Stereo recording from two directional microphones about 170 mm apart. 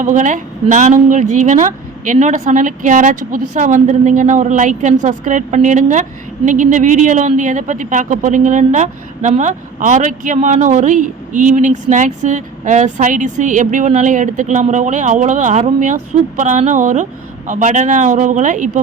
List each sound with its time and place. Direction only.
0.0 s a woman's voice: 50° right (ahead or behind)